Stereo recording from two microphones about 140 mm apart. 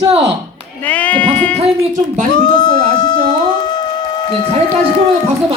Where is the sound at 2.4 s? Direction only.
30° left (ahead or behind).